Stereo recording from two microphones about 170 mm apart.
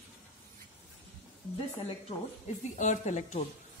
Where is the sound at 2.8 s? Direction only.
45° left (ahead or behind).